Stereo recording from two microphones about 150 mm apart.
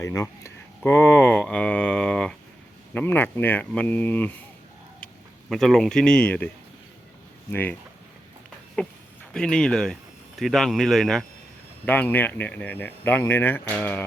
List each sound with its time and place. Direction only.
0.0 s speech: 20° left (ahead or behind)
5.5 s speech: centre (ahead or behind)
7.5 s speech: 10° left (ahead or behind)
8.8 s speech: 5° left (ahead or behind)